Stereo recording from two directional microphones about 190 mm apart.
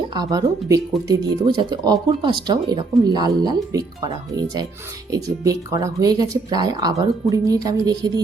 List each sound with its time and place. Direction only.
0.1 s speech: 20° right (ahead or behind)